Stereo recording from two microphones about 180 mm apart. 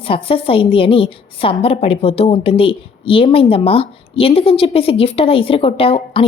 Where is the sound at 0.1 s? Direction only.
30° left (ahead or behind).